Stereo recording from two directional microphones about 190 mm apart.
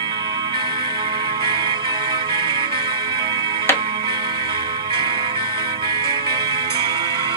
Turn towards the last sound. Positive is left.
turn(degrees=-25)  # may be behind; listen again after turning